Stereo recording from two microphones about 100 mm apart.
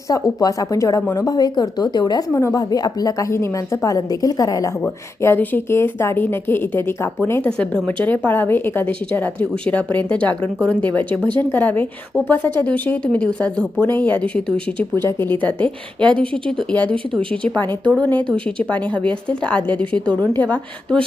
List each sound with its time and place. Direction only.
0.1 s a woman's voice: 35° left (ahead or behind)
2.3 s speech: 30° left (ahead or behind)
2.6 s a woman's voice: 40° left (ahead or behind)
5.2 s speech: 20° left (ahead or behind)
7.4 s speech: 10° left (ahead or behind)
15.0 s speech: 20° left (ahead or behind)